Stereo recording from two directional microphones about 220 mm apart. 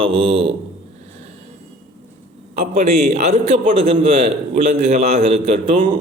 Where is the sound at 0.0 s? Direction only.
25° right (ahead or behind).